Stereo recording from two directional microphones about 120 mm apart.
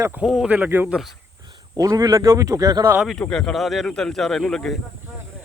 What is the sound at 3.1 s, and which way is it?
Speech, 5° left (ahead or behind).